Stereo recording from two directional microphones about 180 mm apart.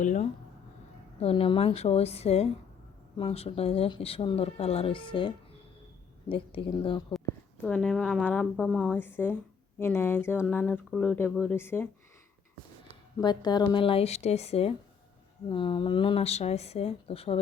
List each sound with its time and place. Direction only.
0.0 s speech: 45° left (ahead or behind)
1.2 s speech: 30° left (ahead or behind)
7.6 s a woman's voice: 5° left (ahead or behind)
13.1 s speech: 20° left (ahead or behind)